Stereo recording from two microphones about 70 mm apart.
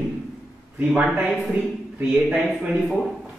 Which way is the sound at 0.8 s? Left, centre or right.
Centre.